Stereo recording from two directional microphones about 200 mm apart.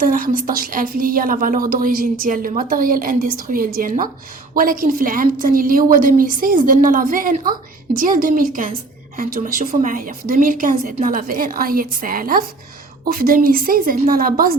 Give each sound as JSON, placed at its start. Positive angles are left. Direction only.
{"t": 0.0, "sound": "a woman's voice", "side_deg": -45}